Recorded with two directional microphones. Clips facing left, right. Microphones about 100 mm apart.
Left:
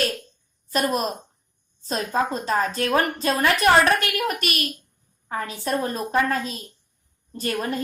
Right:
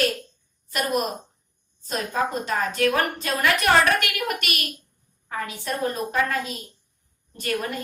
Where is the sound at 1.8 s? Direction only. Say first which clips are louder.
Left 2 dB; 35° left (ahead or behind).